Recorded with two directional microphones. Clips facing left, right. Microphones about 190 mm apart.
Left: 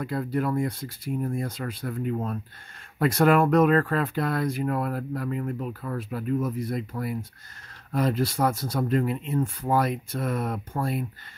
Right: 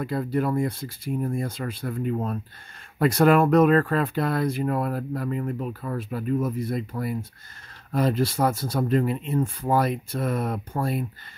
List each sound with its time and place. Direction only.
0.0 s speech: 30° right (ahead or behind)